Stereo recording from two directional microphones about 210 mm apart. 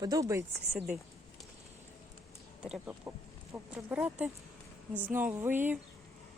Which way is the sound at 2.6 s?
5° right (ahead or behind).